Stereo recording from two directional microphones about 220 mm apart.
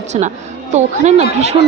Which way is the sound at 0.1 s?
30° right (ahead or behind).